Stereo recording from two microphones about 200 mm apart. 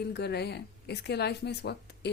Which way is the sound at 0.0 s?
55° left (ahead or behind).